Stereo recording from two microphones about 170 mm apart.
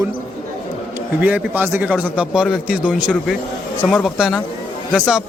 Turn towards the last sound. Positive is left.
turn(degrees=-5)  # may be behind; listen again after turning